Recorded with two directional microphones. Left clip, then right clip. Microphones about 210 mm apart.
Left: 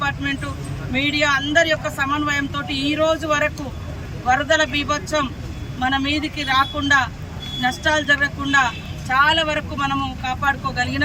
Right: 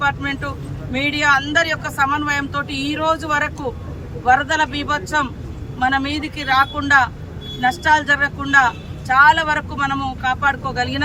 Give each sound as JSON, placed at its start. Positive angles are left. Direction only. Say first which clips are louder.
{"t": 0.9, "sound": "speech", "louder": "right 2 dB", "side_deg": -25}